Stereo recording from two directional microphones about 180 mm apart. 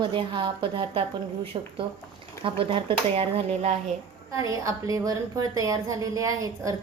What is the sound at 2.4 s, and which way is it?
A woman's voice, 30° right (ahead or behind).